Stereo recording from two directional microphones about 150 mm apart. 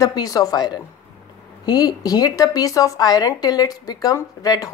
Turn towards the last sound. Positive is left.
turn(degrees=25)  # may be behind; listen again after turning